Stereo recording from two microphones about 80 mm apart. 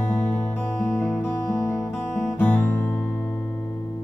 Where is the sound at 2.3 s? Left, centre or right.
Centre.